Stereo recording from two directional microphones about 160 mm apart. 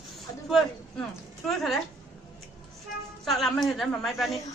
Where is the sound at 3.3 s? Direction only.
Centre (ahead or behind).